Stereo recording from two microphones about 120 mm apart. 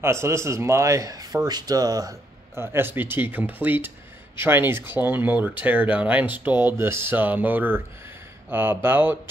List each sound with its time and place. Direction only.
0.0 s speech: 20° right (ahead or behind)
2.6 s speech: 20° right (ahead or behind)